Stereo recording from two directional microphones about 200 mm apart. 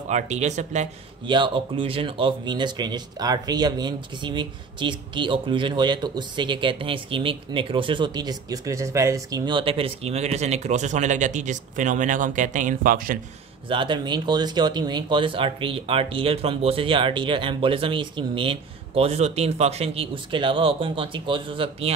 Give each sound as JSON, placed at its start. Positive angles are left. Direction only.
{"t": 0.1, "sound": "speech", "side_deg": -35}
{"t": 1.2, "sound": "speech", "side_deg": -25}
{"t": 13.7, "sound": "speech", "side_deg": -25}